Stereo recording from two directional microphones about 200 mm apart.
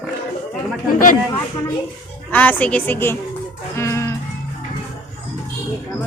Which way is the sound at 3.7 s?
15° left (ahead or behind).